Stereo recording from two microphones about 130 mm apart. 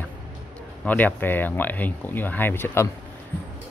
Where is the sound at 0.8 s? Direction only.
15° left (ahead or behind).